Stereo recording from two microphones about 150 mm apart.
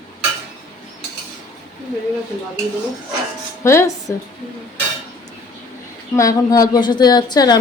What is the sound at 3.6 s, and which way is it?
Speech, 20° left (ahead or behind).